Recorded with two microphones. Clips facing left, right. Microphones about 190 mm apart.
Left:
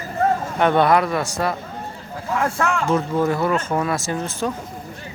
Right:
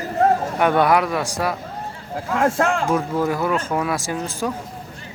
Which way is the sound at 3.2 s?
5° right (ahead or behind).